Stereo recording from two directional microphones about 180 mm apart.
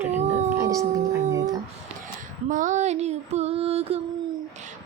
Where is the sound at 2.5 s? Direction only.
45° right (ahead or behind).